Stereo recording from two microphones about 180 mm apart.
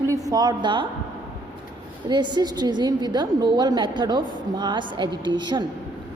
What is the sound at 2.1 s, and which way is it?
A woman's voice, 25° right (ahead or behind).